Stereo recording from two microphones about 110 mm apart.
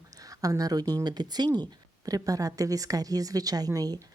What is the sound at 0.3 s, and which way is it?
Speech, 35° right (ahead or behind).